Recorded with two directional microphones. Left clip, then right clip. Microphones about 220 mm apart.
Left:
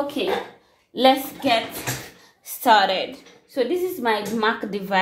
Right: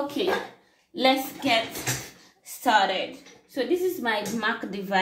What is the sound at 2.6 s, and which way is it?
Speech, 50° left (ahead or behind).